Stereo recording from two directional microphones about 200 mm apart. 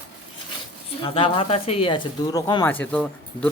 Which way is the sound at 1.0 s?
25° left (ahead or behind).